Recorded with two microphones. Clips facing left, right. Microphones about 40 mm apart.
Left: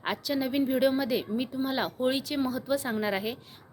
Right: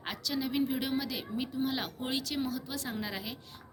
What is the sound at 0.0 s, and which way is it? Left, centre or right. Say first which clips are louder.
A woman's voice: left 5 dB; left.